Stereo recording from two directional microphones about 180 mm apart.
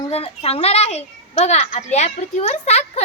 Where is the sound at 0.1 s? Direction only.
35° left (ahead or behind).